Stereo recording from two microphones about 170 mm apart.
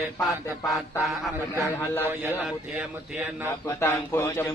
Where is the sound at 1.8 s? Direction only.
15° left (ahead or behind).